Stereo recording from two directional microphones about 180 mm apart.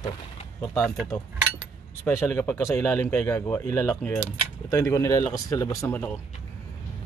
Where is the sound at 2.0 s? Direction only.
15° left (ahead or behind).